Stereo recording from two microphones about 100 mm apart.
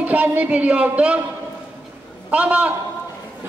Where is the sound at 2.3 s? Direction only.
15° right (ahead or behind).